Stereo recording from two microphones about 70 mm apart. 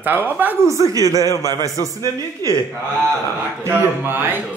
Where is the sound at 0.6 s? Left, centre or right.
Right.